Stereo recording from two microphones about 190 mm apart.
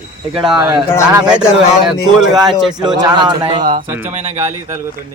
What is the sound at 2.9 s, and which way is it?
Speech, 20° right (ahead or behind).